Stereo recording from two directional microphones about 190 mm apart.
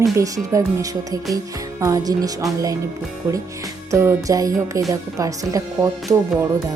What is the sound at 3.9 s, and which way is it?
Speech, 15° right (ahead or behind).